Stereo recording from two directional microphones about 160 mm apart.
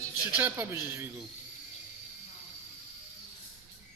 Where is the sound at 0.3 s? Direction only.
15° right (ahead or behind).